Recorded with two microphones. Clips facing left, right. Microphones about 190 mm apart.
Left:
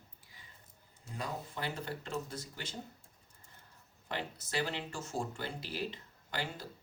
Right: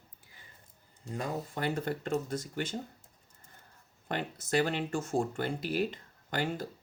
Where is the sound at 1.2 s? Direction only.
50° right (ahead or behind).